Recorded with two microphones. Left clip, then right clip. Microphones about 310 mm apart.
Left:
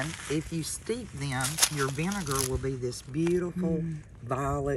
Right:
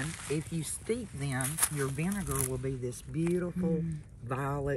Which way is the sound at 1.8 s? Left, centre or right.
Centre.